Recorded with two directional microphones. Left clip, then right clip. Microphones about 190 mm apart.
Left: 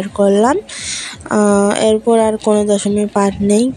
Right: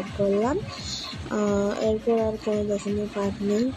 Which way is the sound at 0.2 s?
45° left (ahead or behind).